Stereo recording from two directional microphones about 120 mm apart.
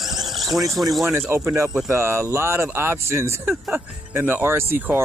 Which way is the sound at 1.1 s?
20° right (ahead or behind).